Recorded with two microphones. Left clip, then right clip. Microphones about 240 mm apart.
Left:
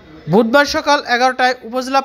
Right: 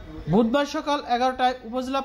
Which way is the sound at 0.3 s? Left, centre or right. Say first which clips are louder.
Left 10 dB; left.